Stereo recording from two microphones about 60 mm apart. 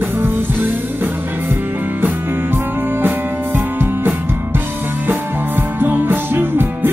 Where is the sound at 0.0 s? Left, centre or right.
Right.